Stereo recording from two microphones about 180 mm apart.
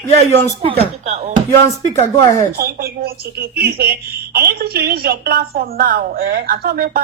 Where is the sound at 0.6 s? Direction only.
35° right (ahead or behind).